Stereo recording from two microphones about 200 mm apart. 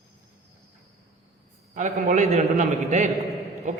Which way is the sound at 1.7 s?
35° right (ahead or behind).